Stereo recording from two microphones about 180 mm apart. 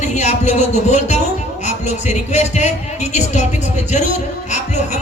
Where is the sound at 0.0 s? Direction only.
40° left (ahead or behind).